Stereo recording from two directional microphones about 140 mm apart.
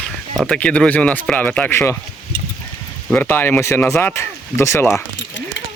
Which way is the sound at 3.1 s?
15° left (ahead or behind).